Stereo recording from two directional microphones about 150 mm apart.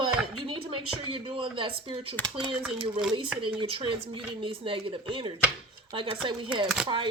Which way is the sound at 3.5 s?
35° right (ahead or behind).